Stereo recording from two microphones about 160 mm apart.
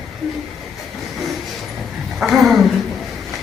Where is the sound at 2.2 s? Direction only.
Centre (ahead or behind).